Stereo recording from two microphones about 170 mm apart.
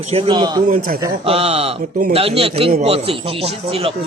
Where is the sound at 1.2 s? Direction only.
35° right (ahead or behind).